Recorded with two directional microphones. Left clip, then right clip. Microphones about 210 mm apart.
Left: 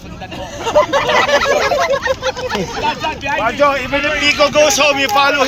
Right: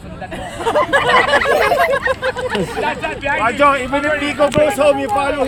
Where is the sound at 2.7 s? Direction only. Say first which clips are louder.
Left 2 dB; 50° left (ahead or behind).